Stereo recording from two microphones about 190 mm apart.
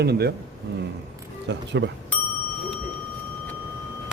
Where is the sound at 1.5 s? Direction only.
65° right (ahead or behind).